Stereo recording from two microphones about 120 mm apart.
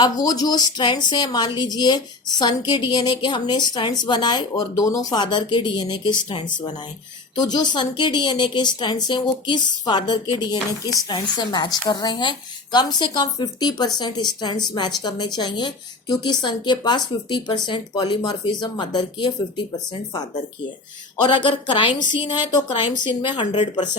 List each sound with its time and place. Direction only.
0.0 s a woman's voice: 35° left (ahead or behind)
21.2 s a woman's voice: 45° left (ahead or behind)